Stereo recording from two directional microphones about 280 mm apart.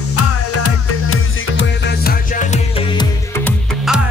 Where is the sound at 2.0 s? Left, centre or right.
Left.